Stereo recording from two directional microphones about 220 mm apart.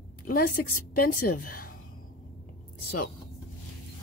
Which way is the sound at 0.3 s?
40° left (ahead or behind).